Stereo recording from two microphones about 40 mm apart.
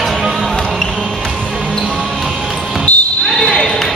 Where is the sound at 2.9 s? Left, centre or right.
Left.